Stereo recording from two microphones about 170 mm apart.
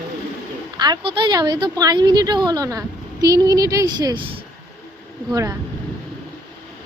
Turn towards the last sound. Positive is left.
turn(degrees=-20)  # may be behind; listen again after turning